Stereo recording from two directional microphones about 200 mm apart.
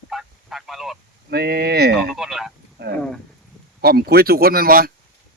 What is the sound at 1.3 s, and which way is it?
Speech, 50° right (ahead or behind).